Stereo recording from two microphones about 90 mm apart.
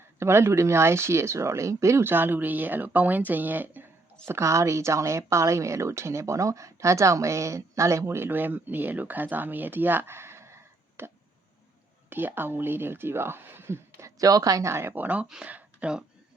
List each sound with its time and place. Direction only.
0.2 s speech: 30° right (ahead or behind)
4.3 s speech: 30° right (ahead or behind)
14.2 s speech: 40° right (ahead or behind); by 16.0 s 10° right (ahead or behind)